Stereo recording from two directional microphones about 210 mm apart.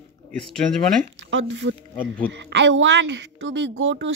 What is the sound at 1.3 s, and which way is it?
Speech, 60° right (ahead or behind).